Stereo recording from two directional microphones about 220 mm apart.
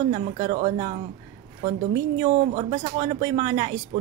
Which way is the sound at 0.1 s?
30° right (ahead or behind).